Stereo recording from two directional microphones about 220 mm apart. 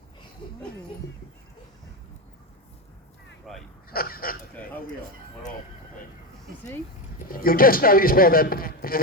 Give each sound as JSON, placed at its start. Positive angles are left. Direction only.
{"t": 3.5, "sound": "speech", "side_deg": 0}
{"t": 3.8, "sound": "honk", "side_deg": 40}
{"t": 7.3, "sound": "speech", "side_deg": 40}